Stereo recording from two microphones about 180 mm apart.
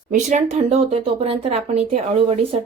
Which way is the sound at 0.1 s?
40° right (ahead or behind).